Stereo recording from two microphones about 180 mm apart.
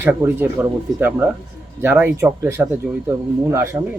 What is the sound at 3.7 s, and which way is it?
Speech, 20° right (ahead or behind).